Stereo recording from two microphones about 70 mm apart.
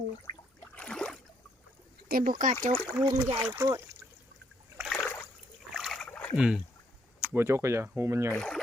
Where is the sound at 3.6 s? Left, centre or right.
Right.